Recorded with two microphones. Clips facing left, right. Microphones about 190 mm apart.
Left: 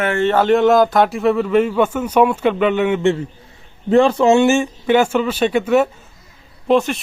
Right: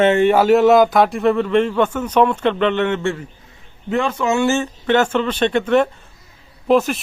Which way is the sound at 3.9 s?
35° left (ahead or behind).